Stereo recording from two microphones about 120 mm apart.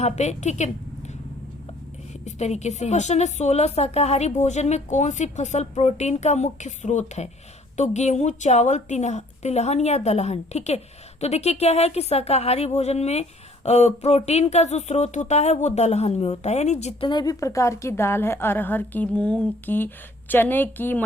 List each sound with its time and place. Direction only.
0.0 s a woman's voice: 70° left (ahead or behind)
2.2 s a woman's voice: 70° left (ahead or behind)
17.0 s a woman's voice: 40° left (ahead or behind); by 21.0 s 15° left (ahead or behind)